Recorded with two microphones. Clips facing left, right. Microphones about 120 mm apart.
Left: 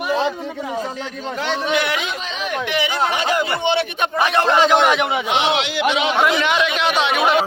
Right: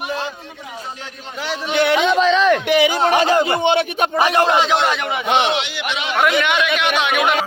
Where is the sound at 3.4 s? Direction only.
45° right (ahead or behind).